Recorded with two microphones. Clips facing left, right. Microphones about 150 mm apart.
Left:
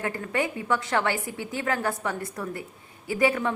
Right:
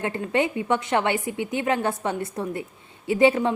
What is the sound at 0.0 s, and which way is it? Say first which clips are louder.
A woman's voice: right 4 dB; 25° right (ahead or behind).